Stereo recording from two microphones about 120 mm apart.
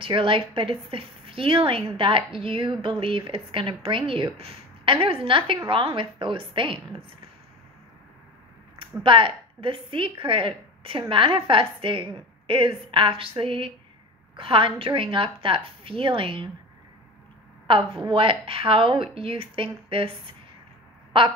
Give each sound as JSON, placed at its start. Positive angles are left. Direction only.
{"t": 0.0, "sound": "a woman's voice", "side_deg": -45}
{"t": 8.7, "sound": "a woman's voice", "side_deg": -45}
{"t": 17.6, "sound": "a woman's voice", "side_deg": -45}